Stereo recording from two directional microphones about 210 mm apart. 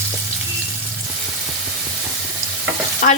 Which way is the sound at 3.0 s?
40° left (ahead or behind).